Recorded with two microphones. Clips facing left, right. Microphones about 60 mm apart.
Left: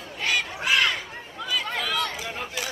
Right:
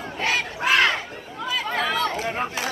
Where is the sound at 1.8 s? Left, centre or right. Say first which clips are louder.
Right 7 dB; right.